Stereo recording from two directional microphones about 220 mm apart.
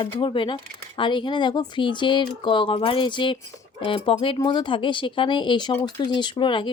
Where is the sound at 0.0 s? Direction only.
20° left (ahead or behind).